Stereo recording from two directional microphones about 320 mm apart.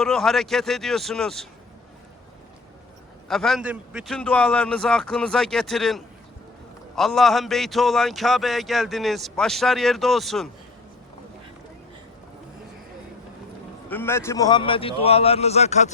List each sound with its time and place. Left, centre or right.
0.0 s a man's voice: centre
3.2 s a man's voice: centre
13.9 s a man's voice: centre